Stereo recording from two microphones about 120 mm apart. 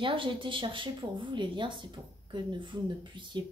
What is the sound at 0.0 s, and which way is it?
Speech, 45° right (ahead or behind).